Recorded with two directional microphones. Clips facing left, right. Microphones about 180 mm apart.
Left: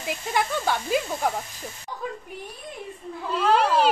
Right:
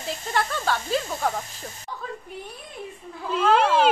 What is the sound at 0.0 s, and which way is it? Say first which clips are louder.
Speech: left 1 dB; 15° left (ahead or behind).